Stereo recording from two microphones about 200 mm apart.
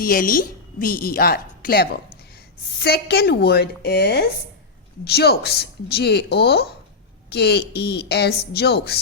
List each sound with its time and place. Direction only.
0.0 s a woman's voice: 45° left (ahead or behind)